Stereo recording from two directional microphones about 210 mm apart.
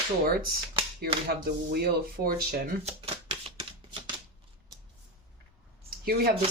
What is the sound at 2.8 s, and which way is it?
Shuffling cards, 30° right (ahead or behind).